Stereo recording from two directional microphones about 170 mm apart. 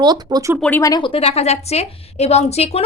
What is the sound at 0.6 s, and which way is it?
A woman's voice, 15° left (ahead or behind).